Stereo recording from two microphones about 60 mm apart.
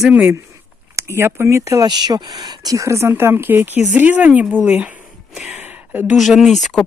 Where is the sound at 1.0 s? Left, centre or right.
Right.